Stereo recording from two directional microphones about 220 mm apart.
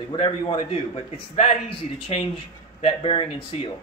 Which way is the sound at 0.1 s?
20° left (ahead or behind).